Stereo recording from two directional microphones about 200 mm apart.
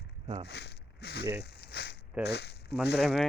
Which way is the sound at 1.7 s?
55° left (ahead or behind).